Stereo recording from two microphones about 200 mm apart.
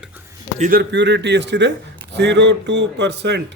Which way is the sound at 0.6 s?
50° right (ahead or behind).